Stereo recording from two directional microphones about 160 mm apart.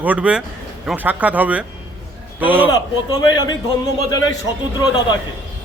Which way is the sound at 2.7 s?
25° left (ahead or behind).